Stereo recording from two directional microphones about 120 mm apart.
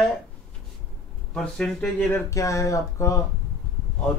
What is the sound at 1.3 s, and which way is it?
Speech, 5° left (ahead or behind).